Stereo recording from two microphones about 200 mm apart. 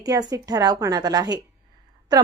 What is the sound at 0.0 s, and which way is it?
A woman's voice, 20° right (ahead or behind).